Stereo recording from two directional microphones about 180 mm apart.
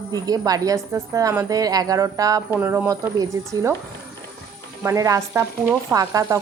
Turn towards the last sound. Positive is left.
turn(degrees=-15)  # may be behind; listen again after turning